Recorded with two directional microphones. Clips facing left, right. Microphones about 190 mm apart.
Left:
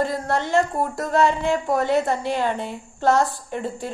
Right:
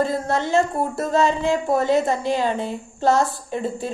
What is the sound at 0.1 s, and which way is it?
A woman's voice, 20° right (ahead or behind).